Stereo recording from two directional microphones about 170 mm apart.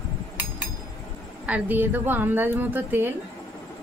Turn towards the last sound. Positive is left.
turn(degrees=-10)  # may be behind; listen again after turning